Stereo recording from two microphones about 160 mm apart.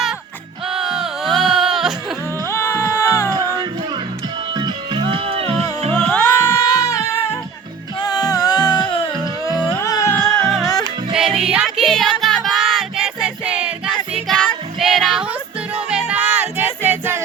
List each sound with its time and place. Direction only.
0.7 s music: 5° right (ahead or behind)
2.5 s music: 15° left (ahead or behind)
3.3 s music: 20° right (ahead or behind); by 5.6 s 35° right (ahead or behind)
5.9 s music: 10° left (ahead or behind)
10.2 s music: centre (ahead or behind)
14.3 s music: 5° left (ahead or behind)